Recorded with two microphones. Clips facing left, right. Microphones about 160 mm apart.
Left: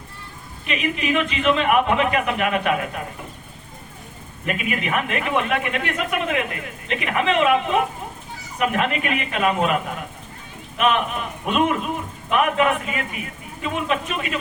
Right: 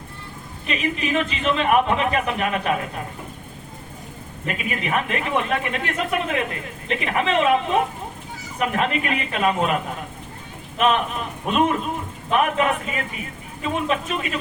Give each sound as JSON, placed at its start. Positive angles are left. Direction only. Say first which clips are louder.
{"t": 0.7, "sound": "speech", "louder": "left 1 dB", "side_deg": -35}
{"t": 4.4, "sound": "speech", "louder": "left 2 dB", "side_deg": -30}